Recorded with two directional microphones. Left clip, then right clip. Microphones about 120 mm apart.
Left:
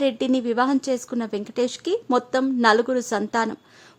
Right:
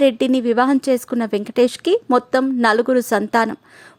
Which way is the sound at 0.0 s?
35° right (ahead or behind).